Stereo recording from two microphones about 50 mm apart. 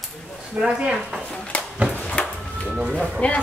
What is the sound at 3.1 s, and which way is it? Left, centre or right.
Speech, left.